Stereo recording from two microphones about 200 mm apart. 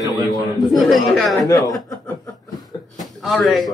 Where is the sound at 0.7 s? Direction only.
Centre (ahead or behind).